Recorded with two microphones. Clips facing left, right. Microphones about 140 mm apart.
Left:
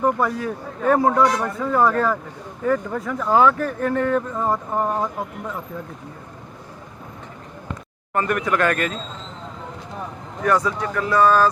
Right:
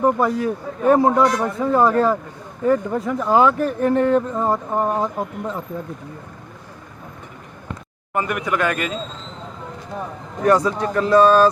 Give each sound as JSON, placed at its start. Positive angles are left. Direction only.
{"t": 0.0, "sound": "speech", "side_deg": -20}
{"t": 8.1, "sound": "a man's voice", "side_deg": -5}
{"t": 10.4, "sound": "speech", "side_deg": -25}